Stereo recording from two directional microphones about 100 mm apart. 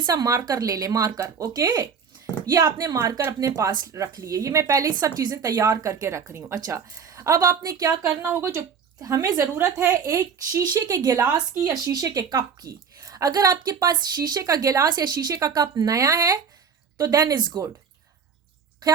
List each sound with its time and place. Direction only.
0.0 s a woman's voice: 40° right (ahead or behind)
8.2 s a woman's voice: 20° right (ahead or behind); by 17.6 s 45° right (ahead or behind)